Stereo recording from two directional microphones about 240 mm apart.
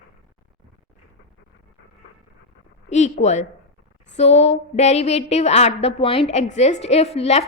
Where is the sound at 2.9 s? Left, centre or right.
Left.